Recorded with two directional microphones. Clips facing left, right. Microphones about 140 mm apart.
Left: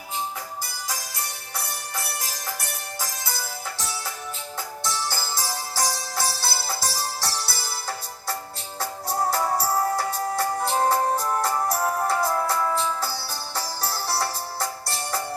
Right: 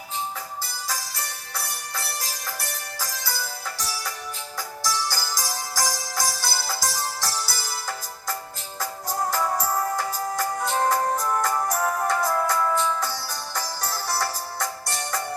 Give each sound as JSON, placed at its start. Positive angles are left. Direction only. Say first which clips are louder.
{"t": 4.8, "sound": "music", "louder": "right 2 dB", "side_deg": 25}